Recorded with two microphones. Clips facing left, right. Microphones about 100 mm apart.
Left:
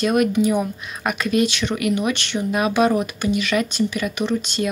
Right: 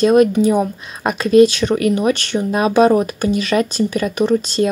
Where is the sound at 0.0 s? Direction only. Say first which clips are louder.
Right 6 dB; 30° right (ahead or behind).